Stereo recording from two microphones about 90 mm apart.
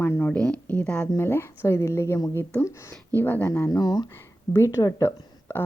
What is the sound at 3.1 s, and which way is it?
Speech, 20° left (ahead or behind).